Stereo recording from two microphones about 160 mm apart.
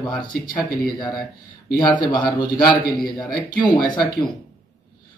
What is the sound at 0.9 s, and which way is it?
A man's voice, 25° left (ahead or behind).